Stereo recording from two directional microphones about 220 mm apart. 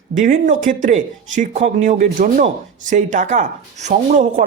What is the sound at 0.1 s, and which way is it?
Speech, 35° right (ahead or behind).